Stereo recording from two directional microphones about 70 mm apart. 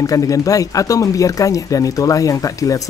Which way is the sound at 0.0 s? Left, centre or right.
Left.